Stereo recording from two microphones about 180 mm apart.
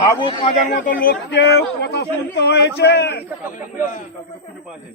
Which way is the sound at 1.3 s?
65° left (ahead or behind).